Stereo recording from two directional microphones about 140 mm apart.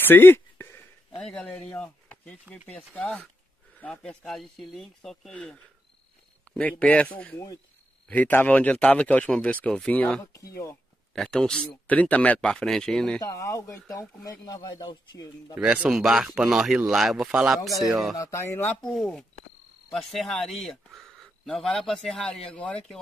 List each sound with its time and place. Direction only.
0.0 s a sound: 15° left (ahead or behind)
1.1 s speech: 5° left (ahead or behind)
10.2 s speech: 25° left (ahead or behind)
11.1 s speech: 5° left (ahead or behind)
13.2 s speech: 20° left (ahead or behind)
15.5 s speech: 10° right (ahead or behind)
18.1 s speech: 20° left (ahead or behind)
18.9 s speech: centre (ahead or behind)